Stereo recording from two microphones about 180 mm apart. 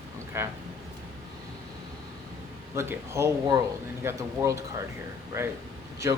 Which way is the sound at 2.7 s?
15° right (ahead or behind).